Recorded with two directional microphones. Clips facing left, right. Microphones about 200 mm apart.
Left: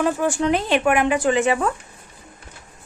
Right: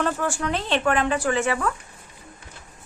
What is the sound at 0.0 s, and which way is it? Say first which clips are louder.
Speech: left 5 dB; 15° left (ahead or behind).